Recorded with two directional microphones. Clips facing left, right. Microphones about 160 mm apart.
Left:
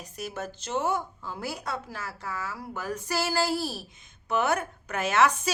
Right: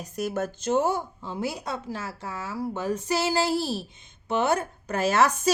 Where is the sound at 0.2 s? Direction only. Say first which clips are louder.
Right 7 dB; 50° right (ahead or behind).